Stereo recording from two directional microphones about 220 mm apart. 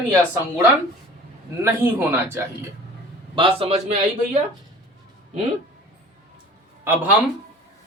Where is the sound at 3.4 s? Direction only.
25° right (ahead or behind).